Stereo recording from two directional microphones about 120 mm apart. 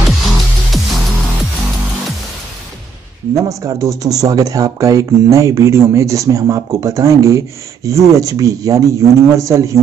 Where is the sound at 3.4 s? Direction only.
25° right (ahead or behind).